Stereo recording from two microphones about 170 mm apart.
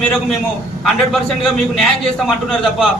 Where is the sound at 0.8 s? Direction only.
Centre (ahead or behind).